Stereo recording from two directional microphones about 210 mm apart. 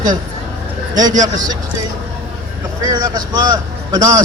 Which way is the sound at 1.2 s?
20° right (ahead or behind).